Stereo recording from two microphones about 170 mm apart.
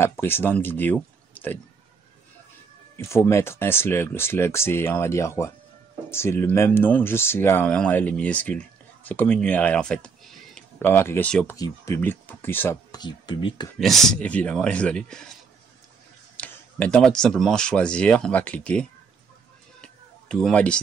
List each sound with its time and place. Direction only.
0.0 s speech: 15° left (ahead or behind)
3.3 s speech: 15° left (ahead or behind)
10.9 s speech: 15° left (ahead or behind)
11.5 s speech: 20° left (ahead or behind)
13.0 s speech: 30° left (ahead or behind)
13.7 s speech: centre (ahead or behind)
16.3 s speech: 10° left (ahead or behind)
19.8 s a sound: 5° left (ahead or behind)